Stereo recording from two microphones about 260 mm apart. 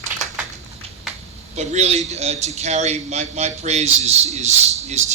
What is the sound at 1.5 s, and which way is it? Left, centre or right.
A man's voice, right.